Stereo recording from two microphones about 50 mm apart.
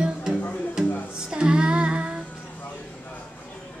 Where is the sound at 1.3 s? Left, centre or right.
Centre.